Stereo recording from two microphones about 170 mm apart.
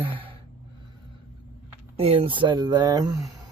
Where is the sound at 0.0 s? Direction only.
30° right (ahead or behind).